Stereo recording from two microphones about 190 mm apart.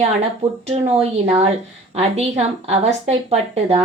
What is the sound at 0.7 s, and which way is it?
A woman's voice, 30° right (ahead or behind).